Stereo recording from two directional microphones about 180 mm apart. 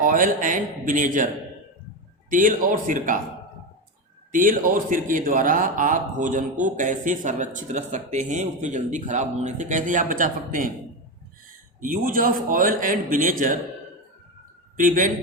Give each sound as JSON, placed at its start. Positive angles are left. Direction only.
{"t": 0.0, "sound": "a man's voice", "side_deg": -50}
{"t": 2.3, "sound": "a man's voice", "side_deg": -45}
{"t": 4.3, "sound": "a man's voice", "side_deg": -50}
{"t": 11.8, "sound": "a man's voice", "side_deg": -50}
{"t": 14.8, "sound": "a man's voice", "side_deg": -50}